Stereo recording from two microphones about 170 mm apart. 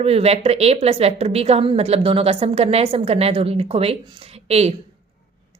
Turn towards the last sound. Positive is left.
turn(degrees=-35)  # may be behind; listen again after turning